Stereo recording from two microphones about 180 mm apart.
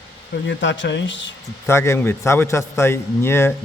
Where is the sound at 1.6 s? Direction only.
15° left (ahead or behind).